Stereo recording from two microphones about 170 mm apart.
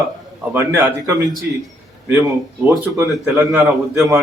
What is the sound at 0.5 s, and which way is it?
Speech, 10° right (ahead or behind).